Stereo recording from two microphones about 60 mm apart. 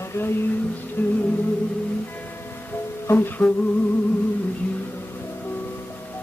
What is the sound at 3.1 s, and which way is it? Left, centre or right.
Humming, left.